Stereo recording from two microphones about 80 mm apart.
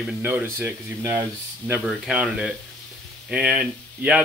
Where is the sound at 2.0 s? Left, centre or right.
Centre.